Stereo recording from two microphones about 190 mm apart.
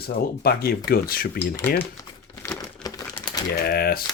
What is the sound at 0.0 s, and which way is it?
Speech, 55° left (ahead or behind).